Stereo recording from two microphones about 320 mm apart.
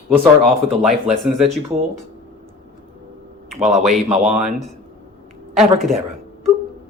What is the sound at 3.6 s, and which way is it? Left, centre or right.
Speech, right.